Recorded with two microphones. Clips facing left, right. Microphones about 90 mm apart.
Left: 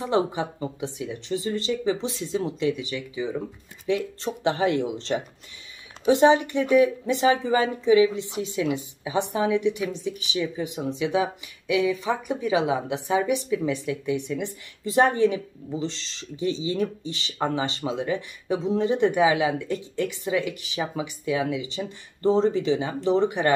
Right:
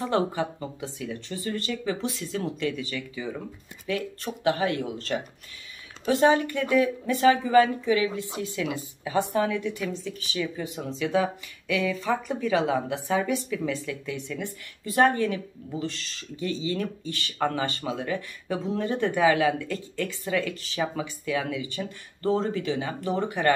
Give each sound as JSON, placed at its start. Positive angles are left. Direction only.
{"t": 0.0, "sound": "a woman's voice", "side_deg": 20}